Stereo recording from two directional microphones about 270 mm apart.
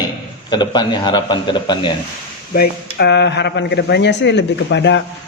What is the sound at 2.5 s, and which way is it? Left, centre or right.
A man's voice, left.